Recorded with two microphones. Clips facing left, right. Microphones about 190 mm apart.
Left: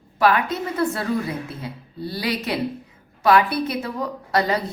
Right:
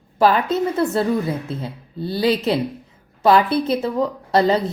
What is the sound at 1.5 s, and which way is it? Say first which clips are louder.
A woman's voice: right 5 dB; 25° right (ahead or behind).